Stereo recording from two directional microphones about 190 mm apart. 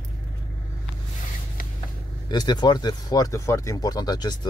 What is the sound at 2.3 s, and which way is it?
Speech, 20° left (ahead or behind).